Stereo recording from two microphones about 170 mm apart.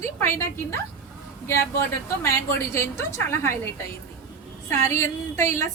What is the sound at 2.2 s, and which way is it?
A woman's voice, 15° left (ahead or behind).